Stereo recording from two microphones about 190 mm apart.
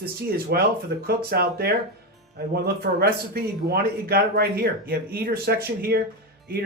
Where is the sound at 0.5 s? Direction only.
55° right (ahead or behind).